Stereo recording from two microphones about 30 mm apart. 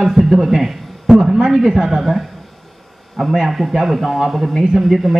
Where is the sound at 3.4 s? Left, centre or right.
Centre.